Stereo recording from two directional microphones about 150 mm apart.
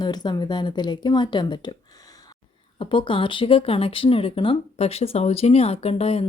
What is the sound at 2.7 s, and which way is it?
Speech, 35° left (ahead or behind).